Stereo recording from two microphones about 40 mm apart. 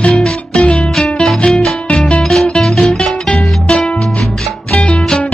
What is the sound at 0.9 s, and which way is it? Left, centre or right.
Music, centre.